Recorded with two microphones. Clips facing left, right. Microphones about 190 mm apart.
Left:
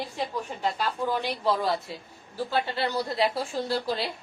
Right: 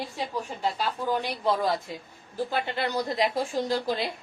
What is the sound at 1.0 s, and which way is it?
Speech, 15° right (ahead or behind).